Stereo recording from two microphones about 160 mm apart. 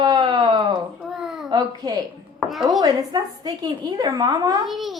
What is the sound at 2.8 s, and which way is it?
A woman's voice, 25° right (ahead or behind).